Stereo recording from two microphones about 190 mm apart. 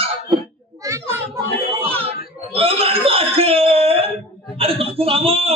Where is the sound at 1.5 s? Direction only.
30° right (ahead or behind).